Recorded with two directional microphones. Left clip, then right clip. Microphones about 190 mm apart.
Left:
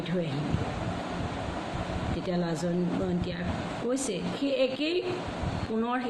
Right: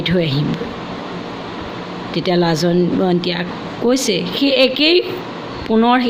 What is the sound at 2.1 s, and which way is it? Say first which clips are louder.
Speech: right 18 dB; 55° right (ahead or behind).